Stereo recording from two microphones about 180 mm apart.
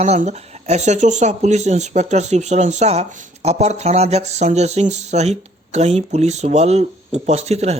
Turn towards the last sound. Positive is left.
turn(degrees=-35)  # may be behind; listen again after turning